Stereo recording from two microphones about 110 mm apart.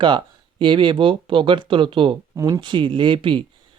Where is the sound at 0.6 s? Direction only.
50° right (ahead or behind).